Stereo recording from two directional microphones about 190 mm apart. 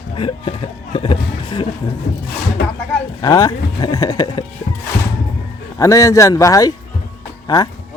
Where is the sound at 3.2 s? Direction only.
20° left (ahead or behind).